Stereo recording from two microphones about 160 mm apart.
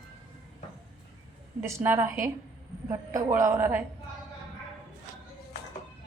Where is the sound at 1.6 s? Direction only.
15° right (ahead or behind).